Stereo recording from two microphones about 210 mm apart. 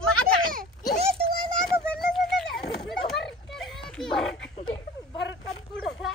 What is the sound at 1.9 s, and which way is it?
Children playing, centre (ahead or behind).